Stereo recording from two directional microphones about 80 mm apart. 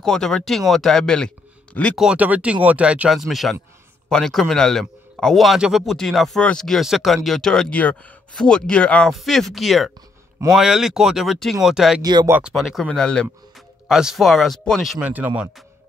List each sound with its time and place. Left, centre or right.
0.0 s speech: centre
2.1 s speech: centre
3.1 s a man's voice: centre
6.8 s a man's voice: centre
7.7 s speech: centre
9.1 s a man's voice: centre
12.0 s speech: right
12.9 s speech: centre
13.8 s a man's voice: centre
15.0 s speech: centre